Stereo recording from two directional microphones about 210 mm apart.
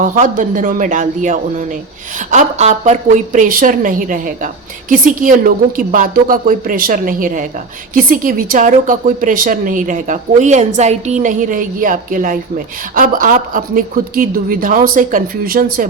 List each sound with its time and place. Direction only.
0.0 s a woman's voice: 40° right (ahead or behind)